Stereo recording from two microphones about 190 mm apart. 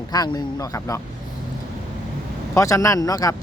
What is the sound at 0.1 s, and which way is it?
Speech, 20° left (ahead or behind).